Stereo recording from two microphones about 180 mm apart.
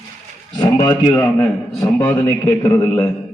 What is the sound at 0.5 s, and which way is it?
A man's voice, 25° left (ahead or behind).